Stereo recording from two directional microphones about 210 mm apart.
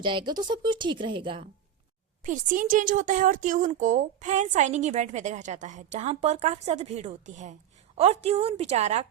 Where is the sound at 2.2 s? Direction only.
40° right (ahead or behind).